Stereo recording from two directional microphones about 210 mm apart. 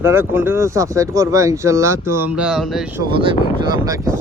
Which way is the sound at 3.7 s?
15° right (ahead or behind).